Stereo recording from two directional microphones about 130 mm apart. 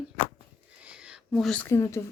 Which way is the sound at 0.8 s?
10° right (ahead or behind).